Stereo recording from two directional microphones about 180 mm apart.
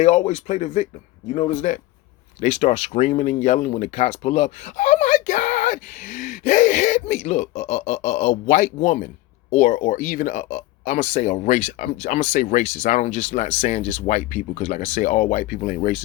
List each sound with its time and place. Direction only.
0.0 s speech: 40° left (ahead or behind)